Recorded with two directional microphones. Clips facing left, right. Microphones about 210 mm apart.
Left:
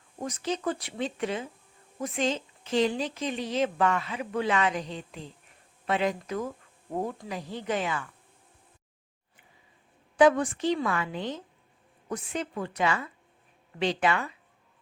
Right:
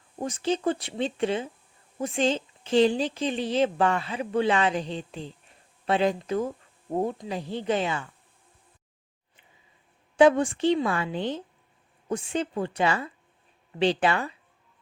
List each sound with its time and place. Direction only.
0.2 s speech: 30° right (ahead or behind)
10.2 s speech: 25° right (ahead or behind)